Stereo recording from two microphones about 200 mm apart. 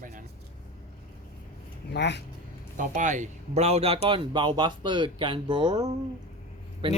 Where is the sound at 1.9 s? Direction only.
60° left (ahead or behind).